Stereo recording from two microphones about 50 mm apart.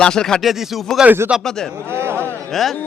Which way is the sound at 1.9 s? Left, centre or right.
Right.